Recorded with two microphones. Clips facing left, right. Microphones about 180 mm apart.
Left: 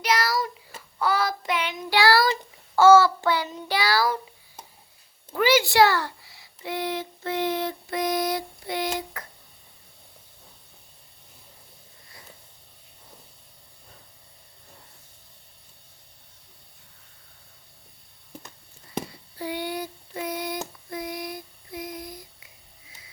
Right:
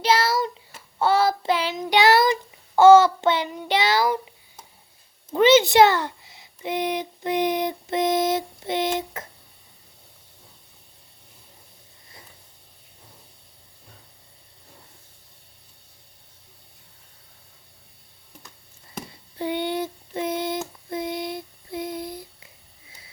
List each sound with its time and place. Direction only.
0.0 s child singing: 25° right (ahead or behind)
5.3 s a sound: 20° right (ahead or behind)
19.4 s child singing: 25° right (ahead or behind)